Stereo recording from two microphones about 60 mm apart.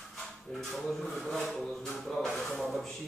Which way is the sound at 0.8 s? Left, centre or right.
Centre.